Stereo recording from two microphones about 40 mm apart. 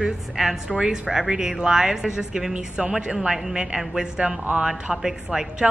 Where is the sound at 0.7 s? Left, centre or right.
Centre.